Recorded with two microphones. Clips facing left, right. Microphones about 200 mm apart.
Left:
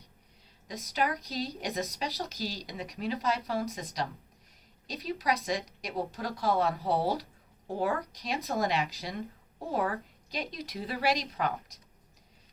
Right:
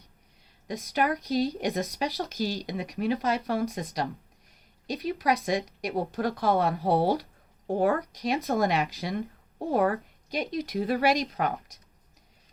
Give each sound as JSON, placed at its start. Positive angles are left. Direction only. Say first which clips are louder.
{"t": 0.7, "sound": "speech", "louder": "right 4 dB", "side_deg": -50}
{"t": 5.0, "sound": "speech", "louder": "right 4 dB", "side_deg": -55}
{"t": 10.2, "sound": "speech", "louder": "right 8 dB", "side_deg": -50}